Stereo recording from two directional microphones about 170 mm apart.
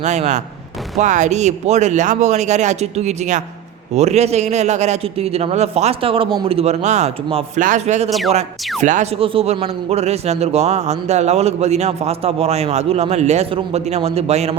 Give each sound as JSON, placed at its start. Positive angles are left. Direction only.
{"t": 0.0, "sound": "speech", "side_deg": -45}
{"t": 9.2, "sound": "speech", "side_deg": -35}